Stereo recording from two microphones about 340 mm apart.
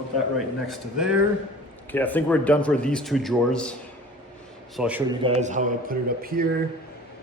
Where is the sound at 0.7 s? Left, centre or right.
Centre.